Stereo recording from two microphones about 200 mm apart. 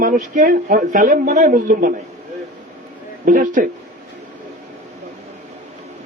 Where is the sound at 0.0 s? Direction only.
40° right (ahead or behind).